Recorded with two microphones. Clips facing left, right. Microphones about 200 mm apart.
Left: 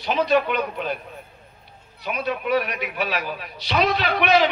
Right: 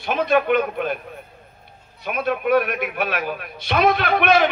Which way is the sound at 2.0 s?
55° right (ahead or behind).